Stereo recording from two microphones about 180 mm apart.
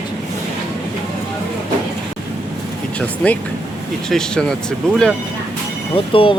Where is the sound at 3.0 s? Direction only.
5° left (ahead or behind).